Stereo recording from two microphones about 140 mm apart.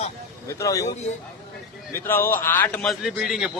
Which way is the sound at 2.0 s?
15° left (ahead or behind).